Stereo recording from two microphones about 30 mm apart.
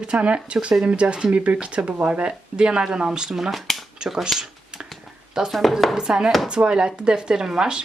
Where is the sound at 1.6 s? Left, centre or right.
Right.